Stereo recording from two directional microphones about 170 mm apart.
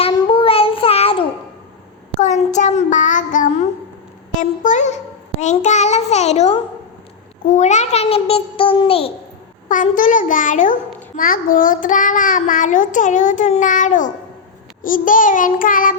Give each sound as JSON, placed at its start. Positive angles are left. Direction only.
{"t": 0.0, "sound": "child singing", "side_deg": 35}
{"t": 2.2, "sound": "child singing", "side_deg": 45}
{"t": 5.4, "sound": "a child's voice", "side_deg": 45}
{"t": 9.6, "sound": "child singing", "side_deg": 50}